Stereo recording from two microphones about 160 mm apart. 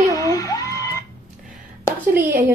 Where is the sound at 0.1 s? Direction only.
20° left (ahead or behind).